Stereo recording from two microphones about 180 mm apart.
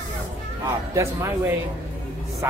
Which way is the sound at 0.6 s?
15° right (ahead or behind).